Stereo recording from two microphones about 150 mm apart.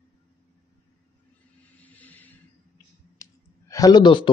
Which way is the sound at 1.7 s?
10° left (ahead or behind).